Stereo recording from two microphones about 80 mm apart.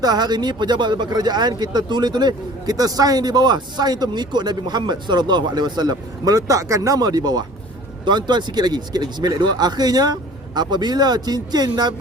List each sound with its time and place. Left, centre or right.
0.0 s speech: right